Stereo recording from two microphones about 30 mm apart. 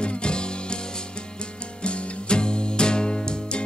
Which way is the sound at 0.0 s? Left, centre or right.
Left.